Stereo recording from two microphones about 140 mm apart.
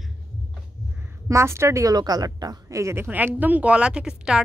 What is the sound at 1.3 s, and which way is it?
A woman's voice, 20° right (ahead or behind).